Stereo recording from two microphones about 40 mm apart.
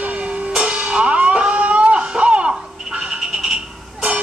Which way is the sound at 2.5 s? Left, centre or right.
Centre.